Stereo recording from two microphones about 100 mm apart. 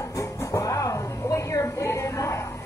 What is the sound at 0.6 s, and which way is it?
Music, 35° left (ahead or behind).